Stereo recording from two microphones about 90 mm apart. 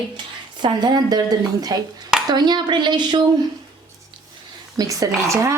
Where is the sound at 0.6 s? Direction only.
55° right (ahead or behind).